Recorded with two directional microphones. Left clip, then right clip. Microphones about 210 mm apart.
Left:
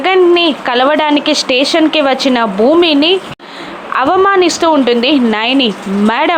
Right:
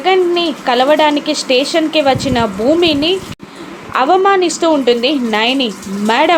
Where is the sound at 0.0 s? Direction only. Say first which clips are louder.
Left 4 dB; 15° left (ahead or behind).